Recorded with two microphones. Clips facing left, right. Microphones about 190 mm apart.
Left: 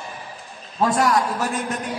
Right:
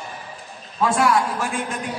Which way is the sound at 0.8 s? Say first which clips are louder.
Even; 40° left (ahead or behind).